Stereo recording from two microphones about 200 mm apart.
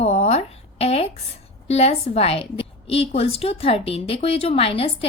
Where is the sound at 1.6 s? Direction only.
30° left (ahead or behind).